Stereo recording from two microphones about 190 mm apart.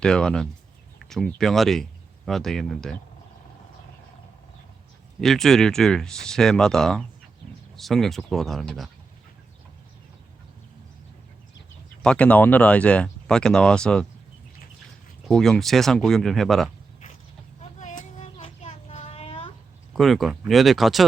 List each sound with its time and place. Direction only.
0.0 s speech: 5° left (ahead or behind)
5.2 s speech: centre (ahead or behind)
12.0 s speech: 5° left (ahead or behind)
15.3 s speech: centre (ahead or behind)
17.6 s child singing: 40° left (ahead or behind)
20.0 s speech: centre (ahead or behind)